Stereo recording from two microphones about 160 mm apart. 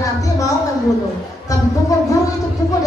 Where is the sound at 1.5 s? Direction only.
20° left (ahead or behind).